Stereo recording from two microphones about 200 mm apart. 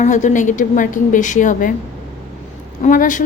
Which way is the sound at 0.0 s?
40° left (ahead or behind).